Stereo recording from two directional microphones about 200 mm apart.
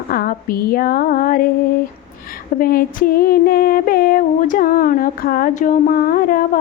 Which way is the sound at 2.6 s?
45° left (ahead or behind).